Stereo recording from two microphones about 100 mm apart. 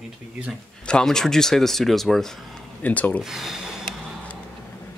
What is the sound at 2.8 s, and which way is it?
Speech, 15° left (ahead or behind).